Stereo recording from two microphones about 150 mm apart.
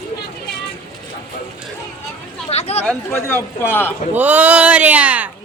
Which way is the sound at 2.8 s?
5° left (ahead or behind).